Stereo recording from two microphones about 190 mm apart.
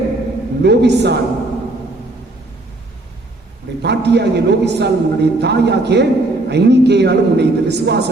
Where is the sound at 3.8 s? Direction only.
60° right (ahead or behind).